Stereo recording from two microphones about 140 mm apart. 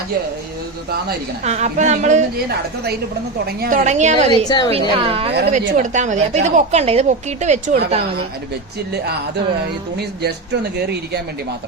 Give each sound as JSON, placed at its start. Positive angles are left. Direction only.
{"t": 1.5, "sound": "a woman's voice", "side_deg": -55}
{"t": 3.6, "sound": "a woman's voice", "side_deg": -80}
{"t": 4.3, "sound": "a woman's voice", "side_deg": 30}
{"t": 4.7, "sound": "a woman's voice", "side_deg": -40}
{"t": 5.5, "sound": "a woman's voice", "side_deg": -60}